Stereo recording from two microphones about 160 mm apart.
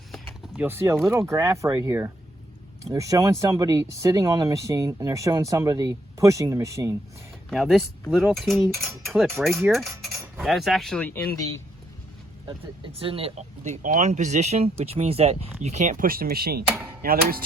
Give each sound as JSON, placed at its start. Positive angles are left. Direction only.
{"t": 0.1, "sound": "a sound", "side_deg": -5}
{"t": 1.1, "sound": "speech", "side_deg": -15}
{"t": 7.5, "sound": "speech", "side_deg": 0}
{"t": 12.5, "sound": "speech", "side_deg": -35}
{"t": 16.6, "sound": "hammer", "side_deg": -5}
{"t": 17.0, "sound": "dishes", "side_deg": -65}